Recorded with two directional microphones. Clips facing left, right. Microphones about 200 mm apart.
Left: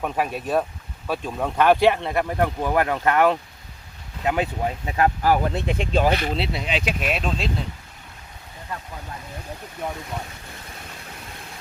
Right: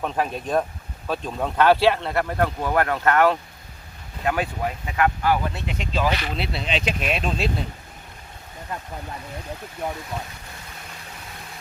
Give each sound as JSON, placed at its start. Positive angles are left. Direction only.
{"t": 0.0, "sound": "speech", "side_deg": 10}
{"t": 6.5, "sound": "speech", "side_deg": 10}